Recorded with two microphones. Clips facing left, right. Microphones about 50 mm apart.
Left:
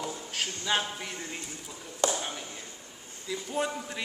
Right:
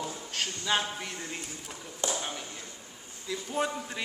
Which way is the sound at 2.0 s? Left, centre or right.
Left.